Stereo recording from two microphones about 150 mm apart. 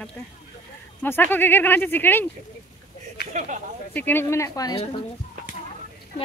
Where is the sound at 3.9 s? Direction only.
15° left (ahead or behind).